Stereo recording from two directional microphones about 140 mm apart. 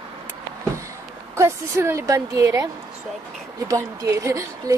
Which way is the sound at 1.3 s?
20° right (ahead or behind).